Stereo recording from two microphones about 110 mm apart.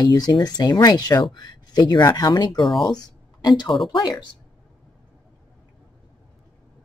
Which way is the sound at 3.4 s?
40° left (ahead or behind).